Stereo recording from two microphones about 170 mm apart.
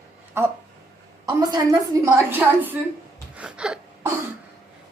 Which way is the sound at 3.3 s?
5° right (ahead or behind).